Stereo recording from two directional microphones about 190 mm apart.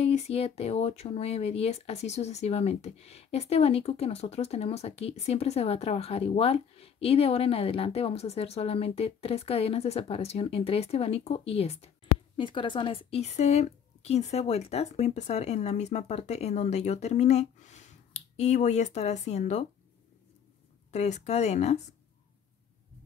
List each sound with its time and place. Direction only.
0.0 s speech: 30° left (ahead or behind)
20.9 s speech: 35° left (ahead or behind)